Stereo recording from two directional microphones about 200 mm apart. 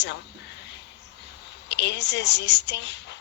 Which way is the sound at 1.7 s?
60° left (ahead or behind).